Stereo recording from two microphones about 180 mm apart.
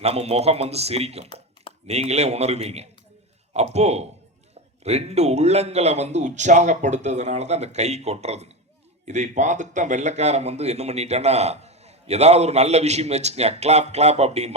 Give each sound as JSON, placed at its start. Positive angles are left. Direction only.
{"t": 0.0, "sound": "a man's voice", "side_deg": -35}